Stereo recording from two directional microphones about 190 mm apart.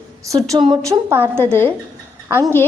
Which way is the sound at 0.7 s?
15° right (ahead or behind).